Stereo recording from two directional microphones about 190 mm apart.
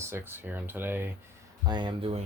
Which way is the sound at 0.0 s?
10° right (ahead or behind).